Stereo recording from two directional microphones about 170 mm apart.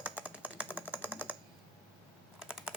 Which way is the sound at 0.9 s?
10° right (ahead or behind).